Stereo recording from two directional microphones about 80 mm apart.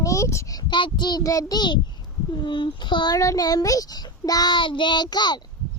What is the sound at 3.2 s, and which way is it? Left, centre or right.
A child's voice, left.